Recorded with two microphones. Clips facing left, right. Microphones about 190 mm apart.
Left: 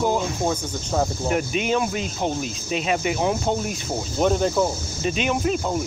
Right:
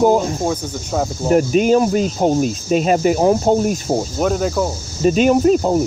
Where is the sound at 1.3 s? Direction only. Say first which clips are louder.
Right 12 dB; 40° right (ahead or behind).